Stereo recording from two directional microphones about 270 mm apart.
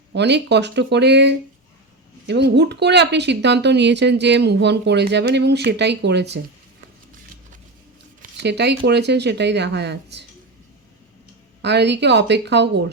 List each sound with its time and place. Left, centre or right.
0.1 s speech: right
8.2 s speech: right
11.6 s speech: right